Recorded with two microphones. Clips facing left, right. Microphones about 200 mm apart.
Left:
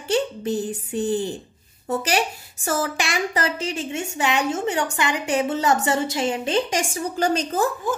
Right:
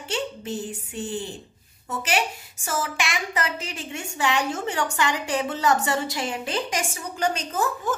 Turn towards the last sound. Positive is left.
turn(degrees=35)  # may be behind; listen again after turning